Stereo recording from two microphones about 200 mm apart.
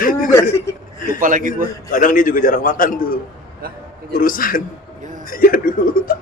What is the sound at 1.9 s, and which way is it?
A man's voice, 40° left (ahead or behind).